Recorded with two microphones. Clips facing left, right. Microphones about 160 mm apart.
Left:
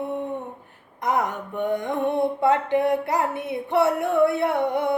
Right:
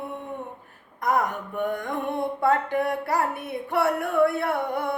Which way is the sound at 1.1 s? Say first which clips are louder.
Even; 20° left (ahead or behind).